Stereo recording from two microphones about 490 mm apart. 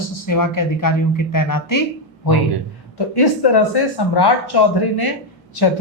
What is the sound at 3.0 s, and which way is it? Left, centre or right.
Speech, left.